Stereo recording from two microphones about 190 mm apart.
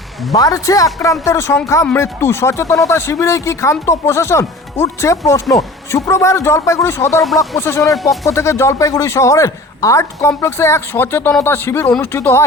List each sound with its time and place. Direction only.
0.3 s speech: 20° left (ahead or behind)
7.9 s speech: centre (ahead or behind)
8.3 s speech: 15° left (ahead or behind)